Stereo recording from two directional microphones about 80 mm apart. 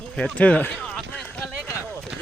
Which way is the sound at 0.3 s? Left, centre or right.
Centre.